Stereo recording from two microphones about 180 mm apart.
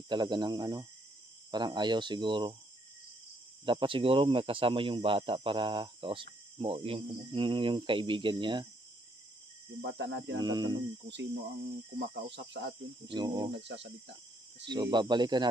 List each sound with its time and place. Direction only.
0.1 s speech: 25° right (ahead or behind)
3.6 s speech: 30° right (ahead or behind)
9.8 s speech: 80° right
10.4 s speech: 25° right (ahead or behind)
11.1 s speech: 75° right (ahead or behind)
13.1 s speech: 25° right (ahead or behind)
13.5 s speech: 80° right
14.7 s speech: 25° right (ahead or behind)